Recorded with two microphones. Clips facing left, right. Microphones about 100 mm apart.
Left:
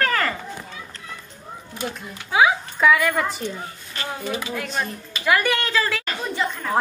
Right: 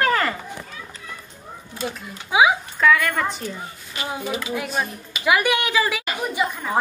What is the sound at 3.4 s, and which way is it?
A woman's voice, 15° right (ahead or behind).